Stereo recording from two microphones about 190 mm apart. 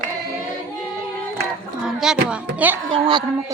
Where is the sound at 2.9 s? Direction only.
25° right (ahead or behind).